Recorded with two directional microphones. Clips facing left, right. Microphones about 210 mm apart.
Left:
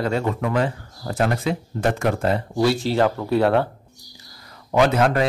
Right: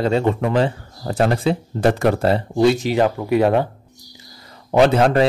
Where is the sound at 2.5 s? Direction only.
20° right (ahead or behind).